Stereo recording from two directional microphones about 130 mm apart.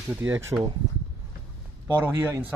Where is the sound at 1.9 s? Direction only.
15° right (ahead or behind).